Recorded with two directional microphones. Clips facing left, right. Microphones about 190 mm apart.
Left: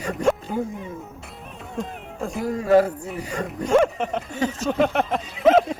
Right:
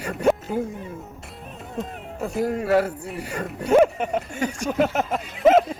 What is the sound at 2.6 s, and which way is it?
Speech, 45° left (ahead or behind).